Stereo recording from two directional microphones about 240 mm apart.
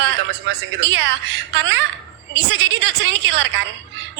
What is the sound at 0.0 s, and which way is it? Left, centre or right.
A woman's voice, right.